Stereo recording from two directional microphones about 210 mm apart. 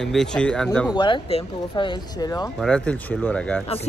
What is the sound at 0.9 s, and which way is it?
Speech, 20° left (ahead or behind).